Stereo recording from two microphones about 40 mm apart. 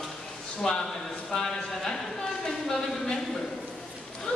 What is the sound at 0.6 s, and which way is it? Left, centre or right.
Speech, centre.